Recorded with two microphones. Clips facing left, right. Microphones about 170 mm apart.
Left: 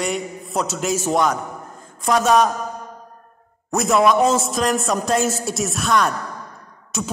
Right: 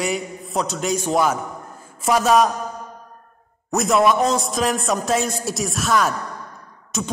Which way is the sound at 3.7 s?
Centre (ahead or behind).